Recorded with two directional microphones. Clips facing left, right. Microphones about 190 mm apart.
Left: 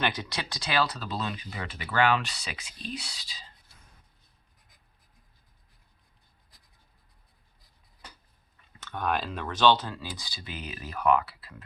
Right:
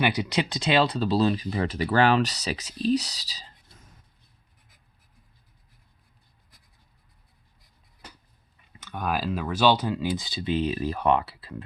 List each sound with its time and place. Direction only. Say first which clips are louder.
0.0 s speech: right 7 dB; 15° right (ahead or behind); by 3.4 s 40° right (ahead or behind)
8.8 s speech: right 1 dB; 10° right (ahead or behind); by 11.5 s 25° right (ahead or behind)